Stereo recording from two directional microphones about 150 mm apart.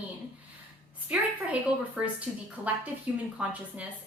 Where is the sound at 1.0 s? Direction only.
10° right (ahead or behind).